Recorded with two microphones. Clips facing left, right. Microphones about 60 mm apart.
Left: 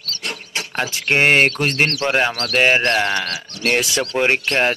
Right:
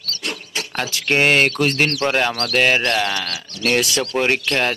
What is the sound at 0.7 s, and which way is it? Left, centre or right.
Speech, left.